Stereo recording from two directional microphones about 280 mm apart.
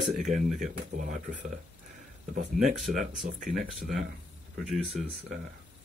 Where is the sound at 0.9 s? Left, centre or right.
Right.